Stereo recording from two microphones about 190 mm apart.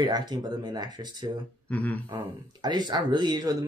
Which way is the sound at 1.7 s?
10° left (ahead or behind).